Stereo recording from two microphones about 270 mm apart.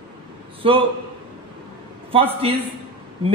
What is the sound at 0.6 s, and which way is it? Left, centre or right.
Speech, centre.